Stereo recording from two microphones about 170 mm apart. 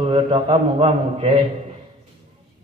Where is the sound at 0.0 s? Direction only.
30° right (ahead or behind).